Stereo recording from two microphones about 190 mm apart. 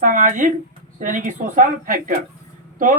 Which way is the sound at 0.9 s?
45° right (ahead or behind).